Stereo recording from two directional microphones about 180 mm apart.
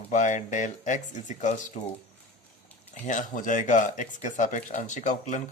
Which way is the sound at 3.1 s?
45° left (ahead or behind).